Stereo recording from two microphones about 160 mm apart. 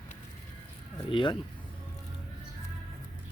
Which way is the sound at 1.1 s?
30° left (ahead or behind).